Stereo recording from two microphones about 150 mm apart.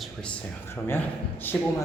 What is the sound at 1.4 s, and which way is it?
Speech, 15° left (ahead or behind).